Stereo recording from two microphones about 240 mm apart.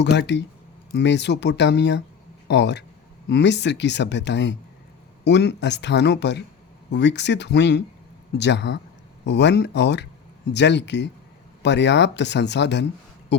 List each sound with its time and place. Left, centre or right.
0.0 s speech: left